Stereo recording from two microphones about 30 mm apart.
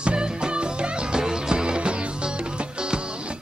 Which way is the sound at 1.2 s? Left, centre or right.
Right.